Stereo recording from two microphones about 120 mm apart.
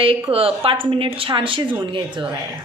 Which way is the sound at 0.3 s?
50° right (ahead or behind).